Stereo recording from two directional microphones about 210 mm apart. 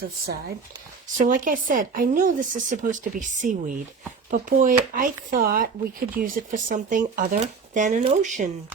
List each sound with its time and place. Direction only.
0.0 s speech: 50° right (ahead or behind)